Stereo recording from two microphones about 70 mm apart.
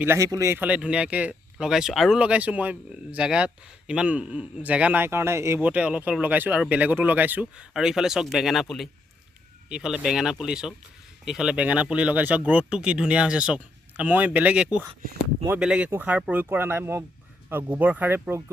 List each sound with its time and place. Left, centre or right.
0.2 s speech: right
0.7 s speech: centre
2.1 s speech: centre
5.0 s speech: right
5.5 s speech: right
7.5 s speech: centre
9.6 s speech: centre
15.9 s speech: right